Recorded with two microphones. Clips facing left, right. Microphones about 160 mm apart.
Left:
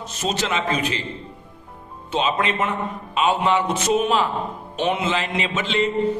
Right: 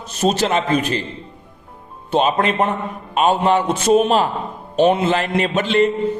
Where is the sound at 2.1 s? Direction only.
55° right (ahead or behind); by 5.2 s 35° right (ahead or behind).